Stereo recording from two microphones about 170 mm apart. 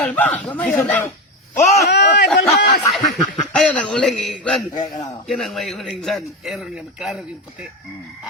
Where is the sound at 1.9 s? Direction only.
75° left (ahead or behind).